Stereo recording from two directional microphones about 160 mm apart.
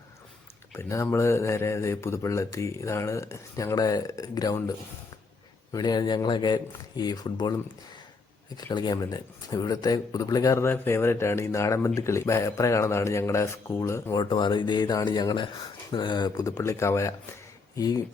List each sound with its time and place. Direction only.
0.7 s speech: 15° left (ahead or behind)
5.7 s speech: 25° left (ahead or behind)
8.5 s speech: 25° left (ahead or behind)